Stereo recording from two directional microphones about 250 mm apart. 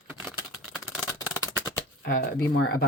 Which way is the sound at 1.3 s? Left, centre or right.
Centre.